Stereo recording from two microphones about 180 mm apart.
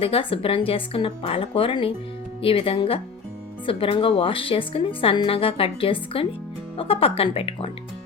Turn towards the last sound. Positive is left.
turn(degrees=30)  # may be behind; listen again after turning